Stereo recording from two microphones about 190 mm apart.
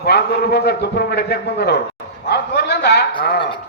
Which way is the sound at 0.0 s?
60° left (ahead or behind).